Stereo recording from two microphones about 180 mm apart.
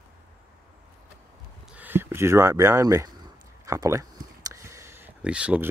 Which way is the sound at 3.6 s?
15° right (ahead or behind).